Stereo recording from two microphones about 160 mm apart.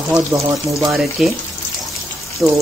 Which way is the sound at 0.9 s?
5° right (ahead or behind).